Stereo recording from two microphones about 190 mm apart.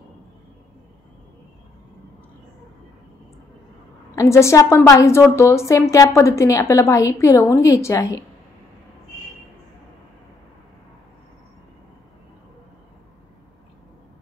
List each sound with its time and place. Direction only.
4.1 s a woman's voice: 15° left (ahead or behind)